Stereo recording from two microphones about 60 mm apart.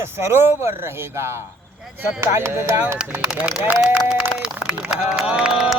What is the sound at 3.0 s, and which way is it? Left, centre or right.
Speech, centre.